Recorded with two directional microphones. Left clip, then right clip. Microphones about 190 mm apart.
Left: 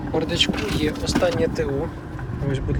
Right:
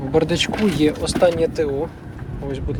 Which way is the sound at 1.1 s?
15° right (ahead or behind).